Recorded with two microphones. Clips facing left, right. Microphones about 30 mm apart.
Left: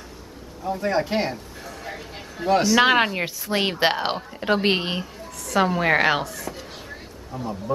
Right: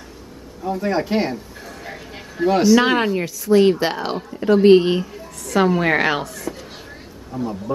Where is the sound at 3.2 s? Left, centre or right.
Left.